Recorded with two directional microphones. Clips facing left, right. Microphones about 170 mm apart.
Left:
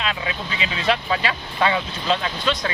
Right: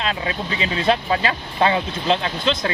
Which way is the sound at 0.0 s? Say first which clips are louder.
Right 2 dB; 35° right (ahead or behind).